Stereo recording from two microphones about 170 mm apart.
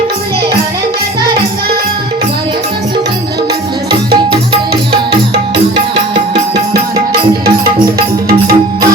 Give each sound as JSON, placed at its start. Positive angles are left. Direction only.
{"t": 7.9, "sound": "music", "side_deg": -65}